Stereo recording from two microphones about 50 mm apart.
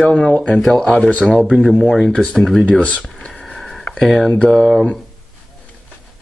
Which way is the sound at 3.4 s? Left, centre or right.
Centre.